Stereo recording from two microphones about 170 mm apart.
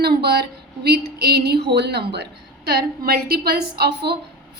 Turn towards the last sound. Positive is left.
turn(degrees=-70)  # may be behind; listen again after turning